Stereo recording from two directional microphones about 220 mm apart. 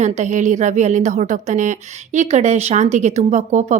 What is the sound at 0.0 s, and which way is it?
A woman's voice, 35° right (ahead or behind).